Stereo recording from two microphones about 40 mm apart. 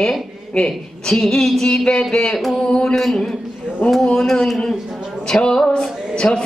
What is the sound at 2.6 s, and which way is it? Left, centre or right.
A woman's voice, centre.